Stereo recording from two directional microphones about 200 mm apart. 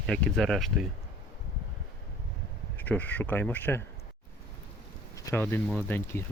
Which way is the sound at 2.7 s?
10° left (ahead or behind).